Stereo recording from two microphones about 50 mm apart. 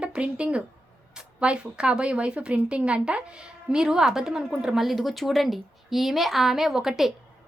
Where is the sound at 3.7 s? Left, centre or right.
Centre.